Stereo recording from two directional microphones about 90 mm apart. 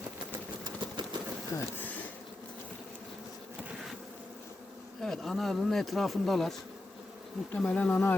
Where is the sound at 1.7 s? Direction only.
20° left (ahead or behind).